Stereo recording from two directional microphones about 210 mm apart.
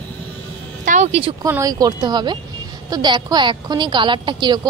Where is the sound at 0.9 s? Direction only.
30° right (ahead or behind).